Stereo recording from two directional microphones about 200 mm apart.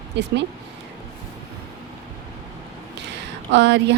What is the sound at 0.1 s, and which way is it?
Speech, 60° right (ahead or behind).